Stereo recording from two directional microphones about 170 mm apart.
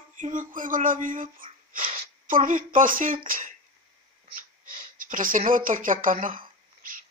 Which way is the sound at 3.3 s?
50° right (ahead or behind).